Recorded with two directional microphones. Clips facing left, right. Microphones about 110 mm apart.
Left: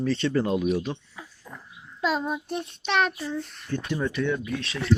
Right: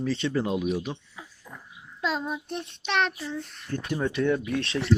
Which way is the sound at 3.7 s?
45° right (ahead or behind).